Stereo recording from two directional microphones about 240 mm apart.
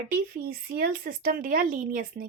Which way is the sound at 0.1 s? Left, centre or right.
Right.